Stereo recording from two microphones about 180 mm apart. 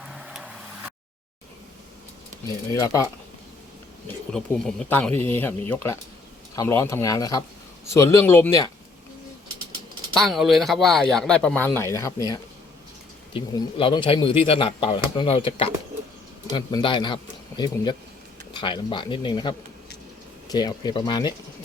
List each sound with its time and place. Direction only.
0.0 s vehicle: 5° right (ahead or behind)
2.7 s speech: 15° left (ahead or behind)
4.3 s speech: 5° left (ahead or behind)
10.2 s speech: centre (ahead or behind); by 17.2 s 25° left (ahead or behind)
17.5 s speech: 10° left (ahead or behind)
18.5 s speech: 25° left (ahead or behind)